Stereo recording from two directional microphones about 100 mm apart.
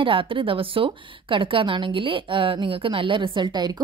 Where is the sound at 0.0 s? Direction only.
60° right (ahead or behind).